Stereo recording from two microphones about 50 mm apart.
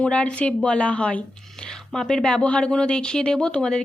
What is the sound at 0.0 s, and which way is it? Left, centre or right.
Speech, left.